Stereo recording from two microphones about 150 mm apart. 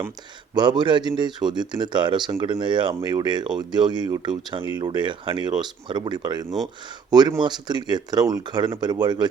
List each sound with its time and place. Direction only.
0.5 s speech: 30° right (ahead or behind)